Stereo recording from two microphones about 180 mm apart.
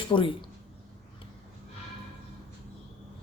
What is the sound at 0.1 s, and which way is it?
Speech, 30° left (ahead or behind).